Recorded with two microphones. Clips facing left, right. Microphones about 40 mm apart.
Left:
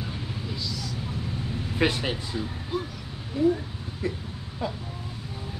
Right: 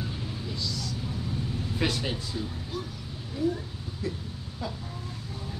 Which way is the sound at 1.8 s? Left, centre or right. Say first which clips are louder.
Left 5 dB; left.